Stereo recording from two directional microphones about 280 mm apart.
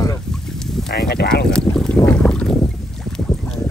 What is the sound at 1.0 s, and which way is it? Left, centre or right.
Speech, left.